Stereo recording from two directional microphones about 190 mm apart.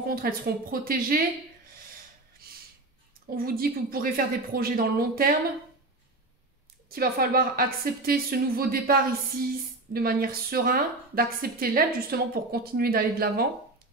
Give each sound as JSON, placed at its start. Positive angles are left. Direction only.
{"t": 0.0, "sound": "a woman's voice", "side_deg": -50}
{"t": 3.3, "sound": "a woman's voice", "side_deg": -50}
{"t": 6.9, "sound": "a woman's voice", "side_deg": -50}
{"t": 9.9, "sound": "a woman's voice", "side_deg": -50}